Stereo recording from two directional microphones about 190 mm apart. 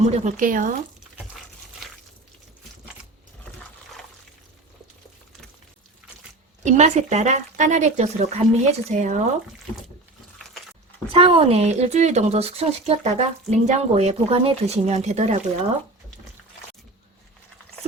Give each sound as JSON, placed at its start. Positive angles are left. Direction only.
{"t": 0.0, "sound": "speech", "side_deg": -45}
{"t": 1.8, "sound": "a sound", "side_deg": 0}
{"t": 6.6, "sound": "speech", "side_deg": -40}
{"t": 11.1, "sound": "speech", "side_deg": -30}